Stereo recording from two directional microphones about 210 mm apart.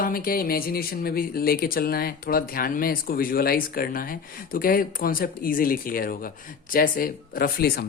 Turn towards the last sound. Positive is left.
turn(degrees=45)  # may be behind; listen again after turning